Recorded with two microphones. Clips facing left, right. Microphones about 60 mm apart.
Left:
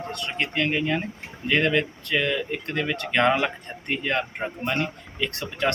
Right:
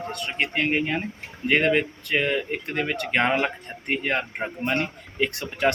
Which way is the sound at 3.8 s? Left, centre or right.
Right.